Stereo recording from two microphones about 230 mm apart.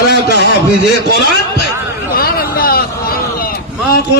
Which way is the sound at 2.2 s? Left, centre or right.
Left.